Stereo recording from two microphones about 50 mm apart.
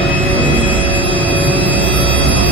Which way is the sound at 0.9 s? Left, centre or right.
Left.